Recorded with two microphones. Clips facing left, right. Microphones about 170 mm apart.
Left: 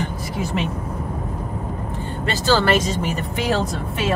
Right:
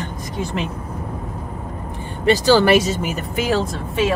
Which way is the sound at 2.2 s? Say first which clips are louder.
Right 5 dB; 15° right (ahead or behind).